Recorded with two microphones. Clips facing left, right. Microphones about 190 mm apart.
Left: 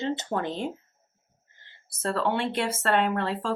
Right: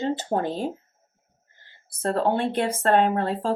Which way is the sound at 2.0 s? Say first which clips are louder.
Right 4 dB; 40° right (ahead or behind).